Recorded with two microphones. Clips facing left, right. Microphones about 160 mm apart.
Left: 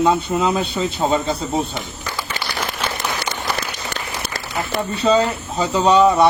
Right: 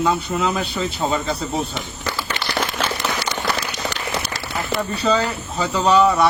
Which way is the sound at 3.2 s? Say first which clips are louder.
Right 1 dB; 50° left (ahead or behind).